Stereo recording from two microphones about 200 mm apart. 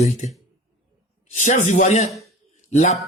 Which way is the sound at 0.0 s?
35° left (ahead or behind).